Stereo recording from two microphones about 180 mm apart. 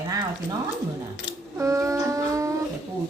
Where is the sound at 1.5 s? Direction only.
20° right (ahead or behind).